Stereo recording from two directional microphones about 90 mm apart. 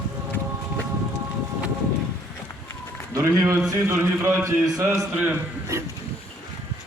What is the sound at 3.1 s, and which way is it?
A man's voice, 35° right (ahead or behind).